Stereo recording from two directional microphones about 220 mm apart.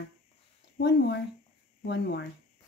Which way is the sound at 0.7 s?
50° left (ahead or behind).